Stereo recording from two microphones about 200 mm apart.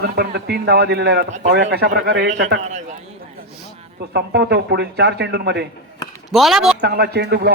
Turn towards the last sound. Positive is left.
turn(degrees=-55)  # may be behind; listen again after turning